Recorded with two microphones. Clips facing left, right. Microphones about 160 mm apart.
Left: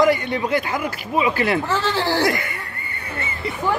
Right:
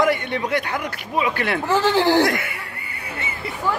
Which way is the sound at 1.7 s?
15° right (ahead or behind).